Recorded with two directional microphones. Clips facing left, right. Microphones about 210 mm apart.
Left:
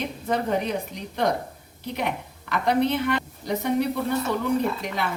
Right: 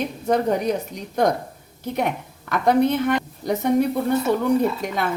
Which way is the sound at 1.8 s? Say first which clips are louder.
Right 4 dB; 45° right (ahead or behind).